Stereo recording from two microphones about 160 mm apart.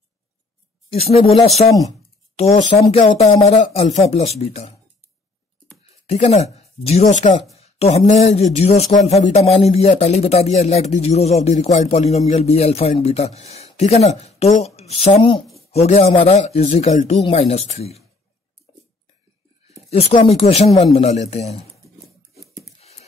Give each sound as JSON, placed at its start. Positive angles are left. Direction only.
{"t": 0.8, "sound": "a man's voice", "side_deg": 40}
{"t": 1.7, "sound": "speech", "side_deg": 20}
{"t": 2.3, "sound": "a man's voice", "side_deg": 40}
{"t": 6.0, "sound": "speech", "side_deg": 40}
{"t": 7.5, "sound": "a sound", "side_deg": 40}
{"t": 8.1, "sound": "a man's voice", "side_deg": 40}
{"t": 19.9, "sound": "a man's voice", "side_deg": 35}